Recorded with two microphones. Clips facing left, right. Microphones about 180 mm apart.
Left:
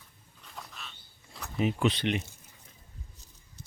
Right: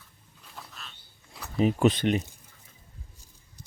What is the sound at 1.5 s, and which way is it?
Speech, 40° right (ahead or behind).